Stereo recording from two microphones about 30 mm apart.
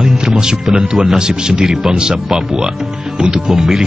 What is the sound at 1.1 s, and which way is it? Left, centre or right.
Speech, right.